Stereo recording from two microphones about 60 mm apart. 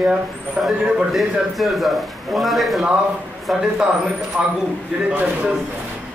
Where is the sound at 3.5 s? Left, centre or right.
Centre.